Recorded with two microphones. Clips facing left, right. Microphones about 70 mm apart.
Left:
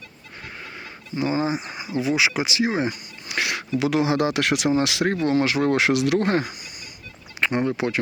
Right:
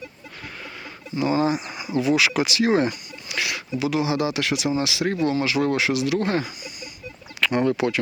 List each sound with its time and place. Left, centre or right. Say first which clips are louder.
1.1 s speech: right 2 dB; left
3.2 s a sound: left 2 dB; left
3.8 s speech: left 2 dB; left
5.7 s speech: left 2 dB; left
6.1 s speech: left 2 dB; left
7.4 s speech: right 2 dB; left